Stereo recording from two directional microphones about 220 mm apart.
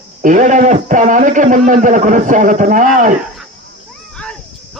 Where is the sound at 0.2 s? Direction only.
35° right (ahead or behind).